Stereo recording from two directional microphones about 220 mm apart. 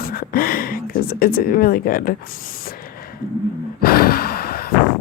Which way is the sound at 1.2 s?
40° left (ahead or behind).